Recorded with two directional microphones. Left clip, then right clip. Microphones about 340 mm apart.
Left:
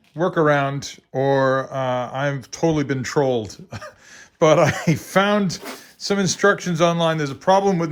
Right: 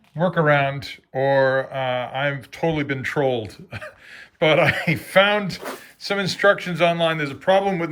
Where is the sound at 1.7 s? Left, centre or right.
Left.